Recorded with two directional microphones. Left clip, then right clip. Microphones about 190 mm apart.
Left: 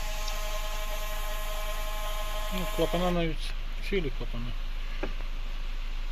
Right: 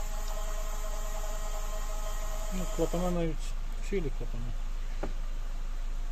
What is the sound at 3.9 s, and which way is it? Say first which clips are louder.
Speech: left 3 dB; 10° right (ahead or behind).